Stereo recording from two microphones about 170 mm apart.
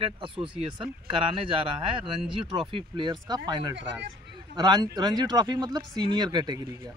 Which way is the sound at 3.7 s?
90° right.